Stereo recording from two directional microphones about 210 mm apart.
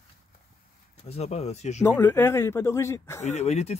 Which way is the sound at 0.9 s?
30° left (ahead or behind).